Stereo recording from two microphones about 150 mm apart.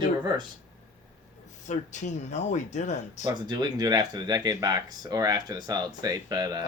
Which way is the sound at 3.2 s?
30° right (ahead or behind).